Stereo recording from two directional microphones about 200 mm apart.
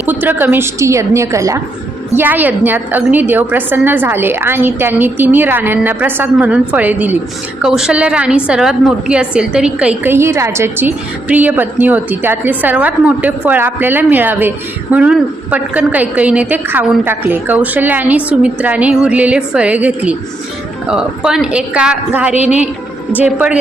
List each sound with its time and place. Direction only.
0.0 s a woman's voice: 10° right (ahead or behind)